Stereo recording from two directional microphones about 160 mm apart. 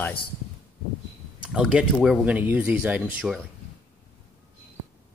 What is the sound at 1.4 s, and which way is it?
Speech, 5° right (ahead or behind).